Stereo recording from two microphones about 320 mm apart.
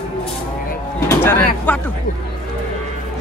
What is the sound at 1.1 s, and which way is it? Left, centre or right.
Speech, centre.